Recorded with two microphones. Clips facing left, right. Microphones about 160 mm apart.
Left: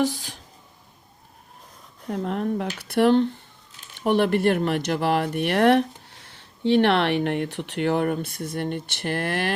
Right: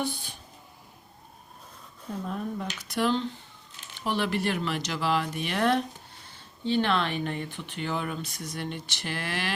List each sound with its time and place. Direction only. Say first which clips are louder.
0.0 s speech: left 8 dB; 90° left
2.0 s speech: left 7 dB; 75° left (ahead or behind); by 9.5 s 55° left (ahead or behind)